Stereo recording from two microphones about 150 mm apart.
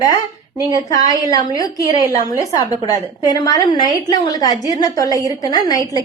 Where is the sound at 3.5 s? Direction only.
25° left (ahead or behind).